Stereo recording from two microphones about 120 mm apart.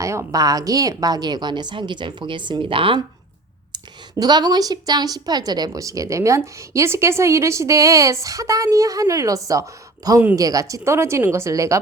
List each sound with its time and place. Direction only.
0.0 s a woman's voice: 25° right (ahead or behind); by 3.0 s 45° right (ahead or behind)
4.2 s a woman's voice: 35° right (ahead or behind)